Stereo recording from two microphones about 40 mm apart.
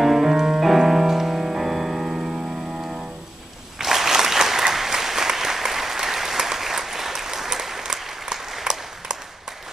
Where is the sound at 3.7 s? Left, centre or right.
Centre.